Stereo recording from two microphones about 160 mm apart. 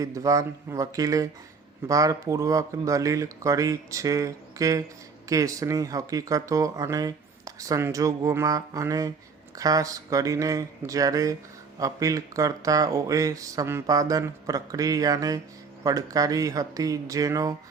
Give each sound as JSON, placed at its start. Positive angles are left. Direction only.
{"t": 0.0, "sound": "speech", "side_deg": -20}